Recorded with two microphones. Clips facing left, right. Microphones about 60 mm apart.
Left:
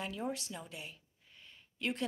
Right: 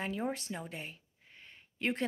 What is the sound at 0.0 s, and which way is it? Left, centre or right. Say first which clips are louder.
Speech: right 3 dB; right.